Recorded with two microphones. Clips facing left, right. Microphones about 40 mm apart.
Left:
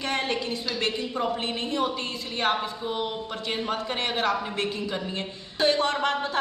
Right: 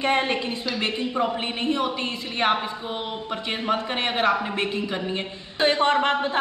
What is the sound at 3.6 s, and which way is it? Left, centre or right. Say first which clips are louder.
A man's voice: right 6 dB; right.